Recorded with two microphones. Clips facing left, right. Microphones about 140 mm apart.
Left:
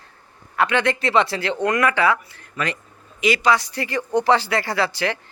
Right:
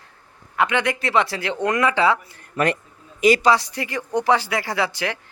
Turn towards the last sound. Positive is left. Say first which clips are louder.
# left 2 dB
turn(degrees=-15)  # may be behind; listen again after turning